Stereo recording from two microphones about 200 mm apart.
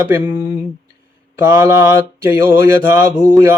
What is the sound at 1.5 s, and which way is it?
Mantra, 15° right (ahead or behind).